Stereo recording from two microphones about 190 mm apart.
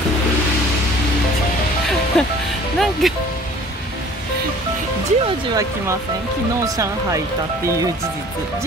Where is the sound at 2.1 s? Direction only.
5° left (ahead or behind).